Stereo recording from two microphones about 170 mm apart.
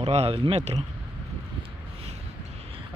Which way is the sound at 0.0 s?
35° right (ahead or behind).